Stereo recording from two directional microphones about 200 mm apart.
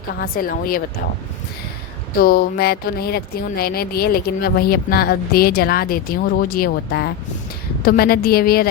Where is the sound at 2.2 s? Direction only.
50° left (ahead or behind).